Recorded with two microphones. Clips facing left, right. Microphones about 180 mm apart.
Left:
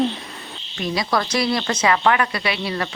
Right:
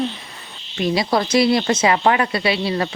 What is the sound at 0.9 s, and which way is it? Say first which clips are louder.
Speech: right 4 dB; 25° right (ahead or behind).